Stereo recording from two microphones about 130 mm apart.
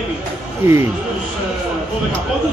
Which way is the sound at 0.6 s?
15° right (ahead or behind).